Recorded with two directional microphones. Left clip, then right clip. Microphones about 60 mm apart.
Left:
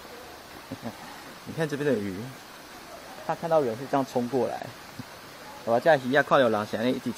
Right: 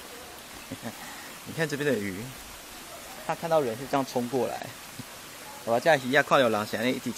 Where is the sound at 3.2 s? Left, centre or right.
Right.